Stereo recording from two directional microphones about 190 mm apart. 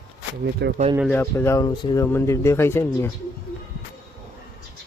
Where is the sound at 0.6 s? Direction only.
65° right (ahead or behind).